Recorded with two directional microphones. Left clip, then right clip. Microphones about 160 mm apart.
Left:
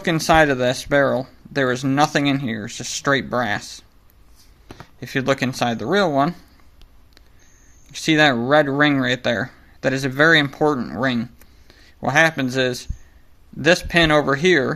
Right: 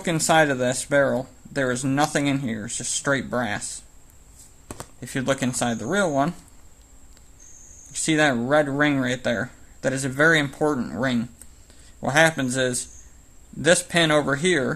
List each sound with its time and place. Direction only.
0.0 s speech: 20° left (ahead or behind)
5.0 s speech: 20° left (ahead or behind)
7.9 s speech: 20° left (ahead or behind)